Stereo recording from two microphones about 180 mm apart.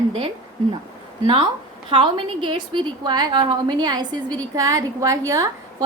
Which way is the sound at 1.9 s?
30° right (ahead or behind).